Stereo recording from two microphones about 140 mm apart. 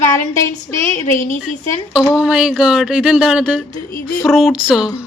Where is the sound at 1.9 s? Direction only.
Centre (ahead or behind).